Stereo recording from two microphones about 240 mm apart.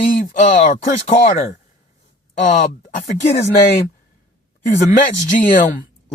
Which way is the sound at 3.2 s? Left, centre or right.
Left.